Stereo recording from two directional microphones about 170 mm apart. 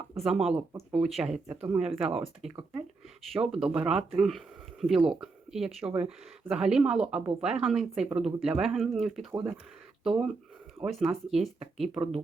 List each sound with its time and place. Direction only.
0.2 s speech: centre (ahead or behind)